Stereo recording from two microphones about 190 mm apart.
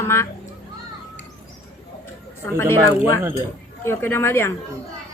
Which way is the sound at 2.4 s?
15° left (ahead or behind).